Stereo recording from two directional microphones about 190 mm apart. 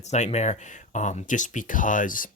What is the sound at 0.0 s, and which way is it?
Speech, 35° left (ahead or behind).